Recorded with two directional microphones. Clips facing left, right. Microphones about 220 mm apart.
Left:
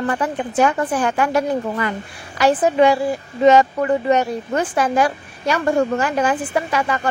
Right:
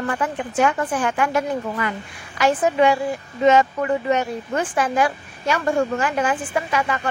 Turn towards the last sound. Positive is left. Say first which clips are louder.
# left 2 dB
turn(degrees=40)  # may be behind; listen again after turning